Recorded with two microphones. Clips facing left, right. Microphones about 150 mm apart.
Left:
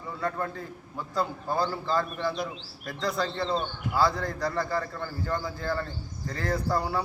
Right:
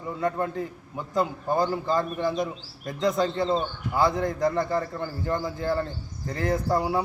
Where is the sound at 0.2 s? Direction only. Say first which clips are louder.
Right 5 dB; 20° right (ahead or behind).